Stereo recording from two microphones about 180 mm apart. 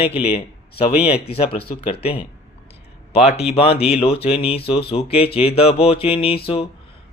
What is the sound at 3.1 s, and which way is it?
Speech, 35° left (ahead or behind).